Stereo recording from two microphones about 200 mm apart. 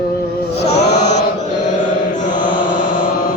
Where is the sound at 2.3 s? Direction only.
25° left (ahead or behind).